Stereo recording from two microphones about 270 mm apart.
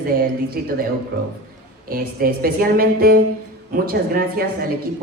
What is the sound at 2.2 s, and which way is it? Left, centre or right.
A woman's voice, right.